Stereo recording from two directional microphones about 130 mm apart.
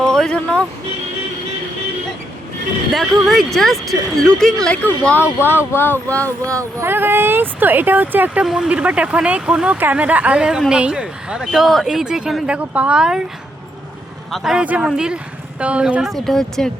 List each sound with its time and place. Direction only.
0.0 s a sound: 5° left (ahead or behind)
2.9 s speech: centre (ahead or behind)
6.4 s speech: 25° right (ahead or behind); by 13.2 s 5° right (ahead or behind)
14.3 s speech: centre (ahead or behind)